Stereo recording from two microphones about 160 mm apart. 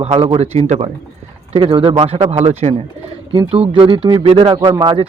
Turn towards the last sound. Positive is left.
turn(degrees=-30)  # may be behind; listen again after turning